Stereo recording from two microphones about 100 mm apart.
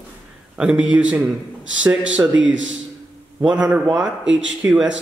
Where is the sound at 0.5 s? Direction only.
10° right (ahead or behind).